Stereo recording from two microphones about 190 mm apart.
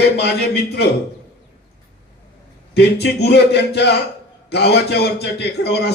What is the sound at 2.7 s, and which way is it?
A man's voice, 60° left (ahead or behind).